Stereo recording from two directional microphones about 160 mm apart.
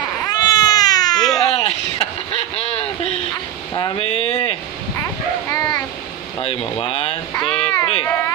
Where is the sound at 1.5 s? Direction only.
40° left (ahead or behind).